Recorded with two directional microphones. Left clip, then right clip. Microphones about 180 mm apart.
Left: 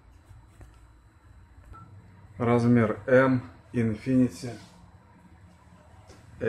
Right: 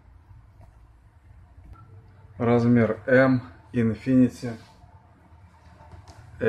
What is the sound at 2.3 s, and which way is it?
Speech, 15° left (ahead or behind).